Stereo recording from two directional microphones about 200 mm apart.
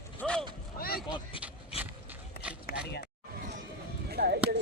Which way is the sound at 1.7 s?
30° left (ahead or behind).